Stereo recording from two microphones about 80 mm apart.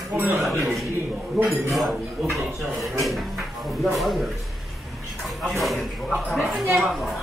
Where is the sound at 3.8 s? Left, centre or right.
Centre.